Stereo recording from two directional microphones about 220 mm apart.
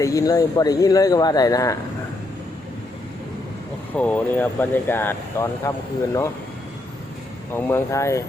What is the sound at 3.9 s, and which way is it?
Speech, 5° left (ahead or behind).